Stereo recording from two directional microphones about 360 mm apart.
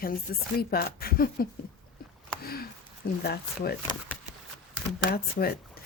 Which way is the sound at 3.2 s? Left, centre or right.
Left.